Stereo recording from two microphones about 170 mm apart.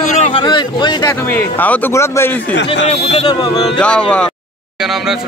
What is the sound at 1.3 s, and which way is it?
Speech, 10° left (ahead or behind).